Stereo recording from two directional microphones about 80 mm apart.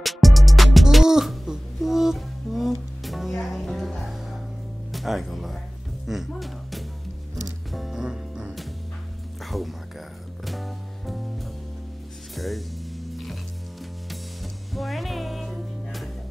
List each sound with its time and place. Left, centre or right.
0.0 s music: centre
14.4 s music: centre